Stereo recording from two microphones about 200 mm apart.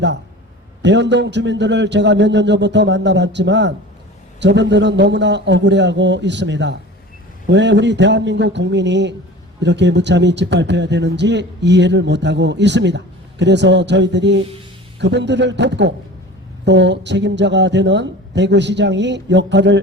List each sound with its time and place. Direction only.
0.8 s speech: 60° right (ahead or behind)